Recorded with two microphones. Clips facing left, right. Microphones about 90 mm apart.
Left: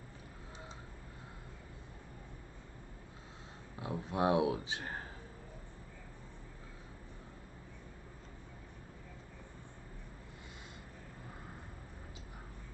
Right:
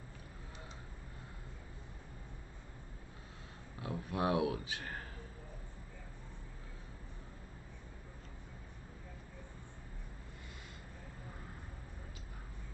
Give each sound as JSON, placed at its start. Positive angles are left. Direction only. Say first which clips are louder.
{"t": 3.8, "sound": "speech", "louder": "left 3 dB", "side_deg": 25}